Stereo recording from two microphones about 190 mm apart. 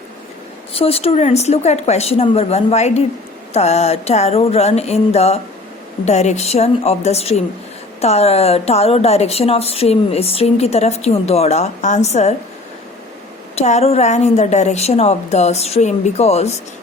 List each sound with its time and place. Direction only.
0.7 s a woman's voice: 30° left (ahead or behind)
13.6 s a woman's voice: 35° left (ahead or behind)